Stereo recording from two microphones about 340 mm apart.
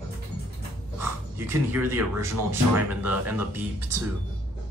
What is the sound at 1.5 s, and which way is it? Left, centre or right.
Speech, centre.